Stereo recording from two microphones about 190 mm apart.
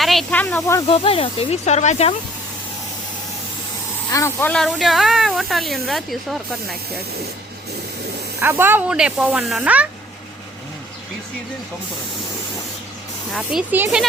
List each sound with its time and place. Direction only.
0.0 s speech: centre (ahead or behind)
0.9 s speech: 30° left (ahead or behind)
4.1 s speech: 15° left (ahead or behind)
8.4 s speech: 10° right (ahead or behind)
13.3 s speech: 5° right (ahead or behind)